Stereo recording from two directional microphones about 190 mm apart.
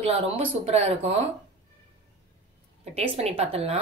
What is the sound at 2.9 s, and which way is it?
Speech, 30° right (ahead or behind).